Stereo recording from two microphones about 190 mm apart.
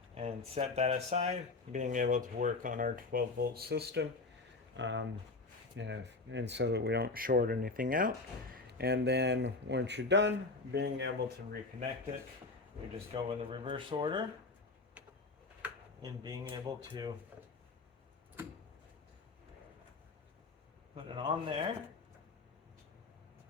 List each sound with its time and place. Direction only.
0.1 s speech: 30° right (ahead or behind); by 4.1 s 60° right (ahead or behind)
4.8 s speech: 75° right (ahead or behind)
13.1 s speech: 25° right (ahead or behind)
15.6 s a sound: 10° right (ahead or behind)
16.0 s speech: 20° right (ahead or behind)
20.9 s speech: 25° right (ahead or behind)